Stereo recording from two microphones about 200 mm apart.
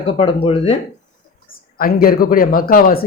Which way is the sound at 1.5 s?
45° left (ahead or behind).